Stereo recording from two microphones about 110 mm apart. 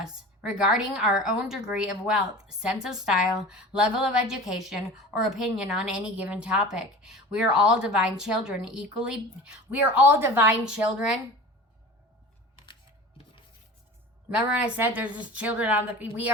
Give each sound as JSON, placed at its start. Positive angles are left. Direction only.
{"t": 0.0, "sound": "a woman's voice", "side_deg": -5}
{"t": 10.8, "sound": "a woman's voice", "side_deg": -5}
{"t": 14.3, "sound": "a woman's voice", "side_deg": -15}